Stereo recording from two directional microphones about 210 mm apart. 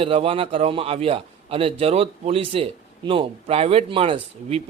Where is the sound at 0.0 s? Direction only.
25° right (ahead or behind).